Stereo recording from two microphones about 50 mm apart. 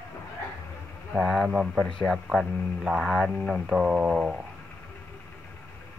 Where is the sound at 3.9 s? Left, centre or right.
Right.